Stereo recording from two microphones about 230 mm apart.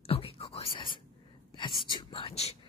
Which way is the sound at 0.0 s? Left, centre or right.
Left.